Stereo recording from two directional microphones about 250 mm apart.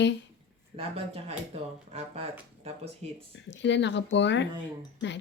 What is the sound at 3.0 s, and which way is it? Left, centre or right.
Speech, right.